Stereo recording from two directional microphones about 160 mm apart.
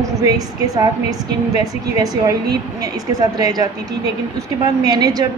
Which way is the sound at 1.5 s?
20° right (ahead or behind).